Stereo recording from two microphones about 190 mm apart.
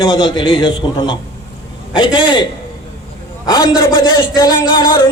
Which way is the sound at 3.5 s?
20° left (ahead or behind).